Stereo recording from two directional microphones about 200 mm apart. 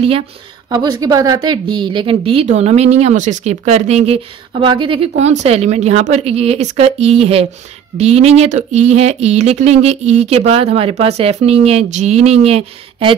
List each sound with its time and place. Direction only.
0.7 s a woman's voice: 20° right (ahead or behind)